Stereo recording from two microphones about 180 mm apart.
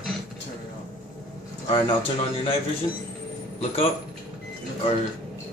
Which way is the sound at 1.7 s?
30° left (ahead or behind).